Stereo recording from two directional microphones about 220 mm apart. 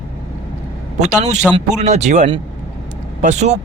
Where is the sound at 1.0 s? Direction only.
30° right (ahead or behind).